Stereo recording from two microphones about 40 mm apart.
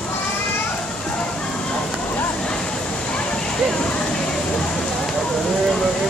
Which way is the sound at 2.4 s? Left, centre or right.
Left.